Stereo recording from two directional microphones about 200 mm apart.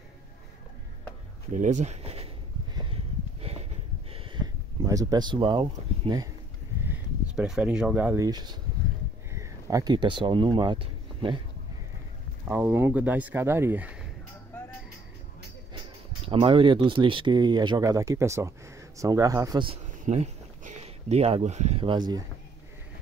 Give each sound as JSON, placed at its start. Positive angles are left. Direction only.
{"t": 1.5, "sound": "speech", "side_deg": -40}
{"t": 2.7, "sound": "a sound", "side_deg": -25}
{"t": 4.8, "sound": "speech", "side_deg": -20}
{"t": 6.8, "sound": "speech", "side_deg": -5}
{"t": 12.4, "sound": "speech", "side_deg": -10}
{"t": 16.3, "sound": "speech", "side_deg": -25}